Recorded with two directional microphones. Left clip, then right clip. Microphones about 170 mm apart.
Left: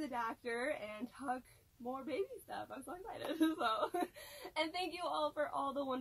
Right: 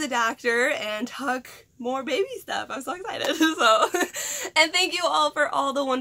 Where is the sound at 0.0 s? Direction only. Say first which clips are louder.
Right 17 dB; 15° right (ahead or behind).